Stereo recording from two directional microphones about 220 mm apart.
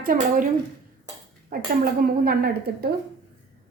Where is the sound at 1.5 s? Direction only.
45° right (ahead or behind).